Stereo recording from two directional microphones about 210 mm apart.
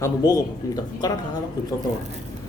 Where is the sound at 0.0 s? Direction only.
15° left (ahead or behind).